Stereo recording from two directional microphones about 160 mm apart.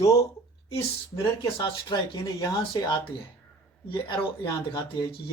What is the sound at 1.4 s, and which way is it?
Speech, 25° left (ahead or behind).